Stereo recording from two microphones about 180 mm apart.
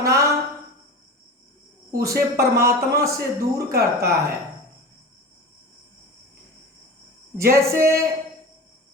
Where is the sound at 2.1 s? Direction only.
60° right (ahead or behind).